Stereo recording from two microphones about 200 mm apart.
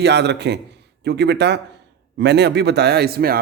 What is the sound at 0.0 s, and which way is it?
Speech, 60° right (ahead or behind).